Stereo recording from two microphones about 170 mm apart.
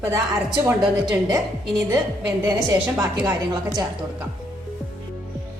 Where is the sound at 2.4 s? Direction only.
20° right (ahead or behind).